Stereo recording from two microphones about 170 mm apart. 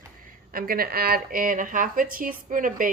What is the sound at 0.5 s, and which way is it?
Speech, 60° right (ahead or behind).